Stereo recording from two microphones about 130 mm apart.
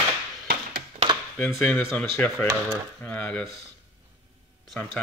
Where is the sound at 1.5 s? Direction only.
10° left (ahead or behind).